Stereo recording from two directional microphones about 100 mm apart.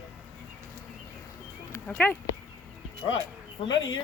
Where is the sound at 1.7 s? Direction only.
15° left (ahead or behind).